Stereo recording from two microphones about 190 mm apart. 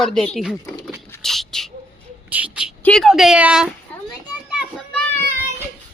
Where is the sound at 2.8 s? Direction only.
Centre (ahead or behind).